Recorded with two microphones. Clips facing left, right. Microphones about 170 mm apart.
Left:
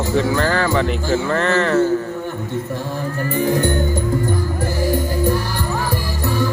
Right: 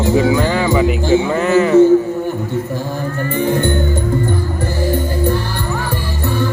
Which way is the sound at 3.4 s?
40° left (ahead or behind).